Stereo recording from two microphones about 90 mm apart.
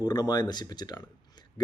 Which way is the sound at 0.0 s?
50° left (ahead or behind).